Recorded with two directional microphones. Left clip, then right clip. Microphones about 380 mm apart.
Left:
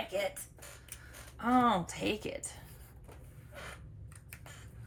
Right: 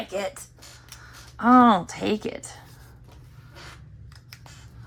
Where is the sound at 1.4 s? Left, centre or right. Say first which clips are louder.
Right 12 dB; centre.